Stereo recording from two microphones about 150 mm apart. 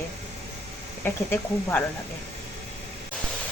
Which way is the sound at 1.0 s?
15° left (ahead or behind).